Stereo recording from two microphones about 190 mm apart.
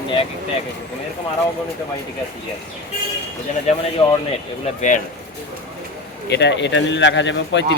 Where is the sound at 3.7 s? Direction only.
35° left (ahead or behind).